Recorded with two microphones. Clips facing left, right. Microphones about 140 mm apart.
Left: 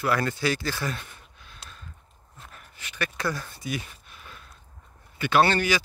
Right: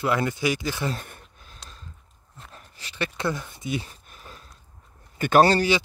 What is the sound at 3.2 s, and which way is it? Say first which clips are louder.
Speech: right 3 dB; 20° right (ahead or behind).